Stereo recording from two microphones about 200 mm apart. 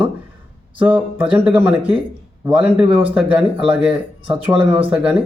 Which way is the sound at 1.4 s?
10° right (ahead or behind).